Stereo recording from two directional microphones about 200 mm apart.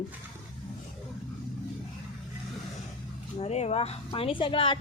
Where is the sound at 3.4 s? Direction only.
30° left (ahead or behind).